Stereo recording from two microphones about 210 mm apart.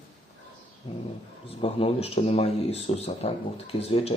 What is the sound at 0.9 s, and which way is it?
Speech, 25° left (ahead or behind).